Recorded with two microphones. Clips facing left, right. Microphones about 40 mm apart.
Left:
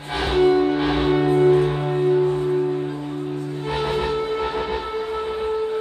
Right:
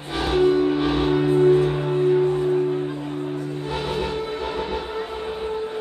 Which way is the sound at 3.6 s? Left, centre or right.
Left.